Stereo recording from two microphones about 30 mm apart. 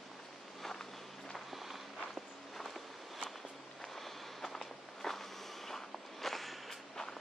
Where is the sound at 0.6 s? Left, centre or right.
Centre.